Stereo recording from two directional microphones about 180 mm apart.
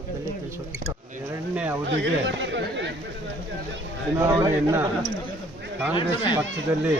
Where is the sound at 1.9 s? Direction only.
90° right.